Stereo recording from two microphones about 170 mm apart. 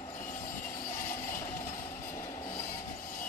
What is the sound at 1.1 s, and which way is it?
Train, 55° left (ahead or behind).